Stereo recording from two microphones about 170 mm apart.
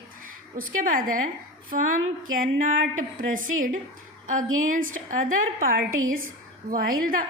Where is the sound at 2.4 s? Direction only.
50° right (ahead or behind).